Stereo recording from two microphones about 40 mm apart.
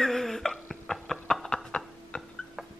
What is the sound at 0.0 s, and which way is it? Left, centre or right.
Music, centre.